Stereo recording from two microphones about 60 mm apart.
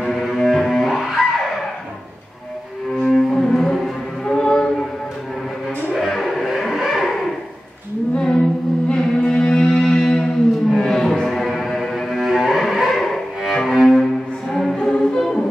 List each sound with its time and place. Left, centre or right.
0.0 s double bass: centre
3.1 s a sound: centre
5.9 s a sound: centre
8.2 s music: centre
10.7 s cello: centre
14.5 s music: centre